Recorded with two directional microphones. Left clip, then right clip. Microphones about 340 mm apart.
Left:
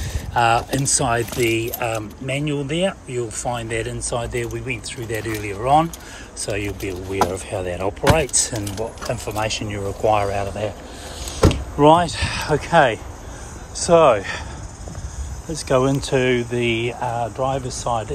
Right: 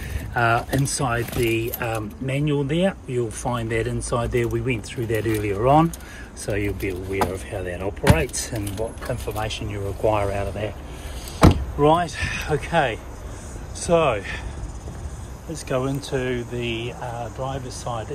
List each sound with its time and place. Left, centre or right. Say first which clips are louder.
0.3 s speech: left 3 dB; centre
11.8 s speech: left 5 dB; centre
15.5 s speech: left 7 dB; centre